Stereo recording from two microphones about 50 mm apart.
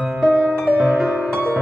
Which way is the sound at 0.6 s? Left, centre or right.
Right.